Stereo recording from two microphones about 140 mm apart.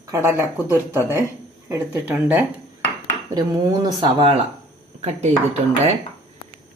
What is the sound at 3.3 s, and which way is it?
Speech, 25° right (ahead or behind).